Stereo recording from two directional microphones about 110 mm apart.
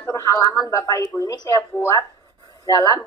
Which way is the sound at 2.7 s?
35° left (ahead or behind).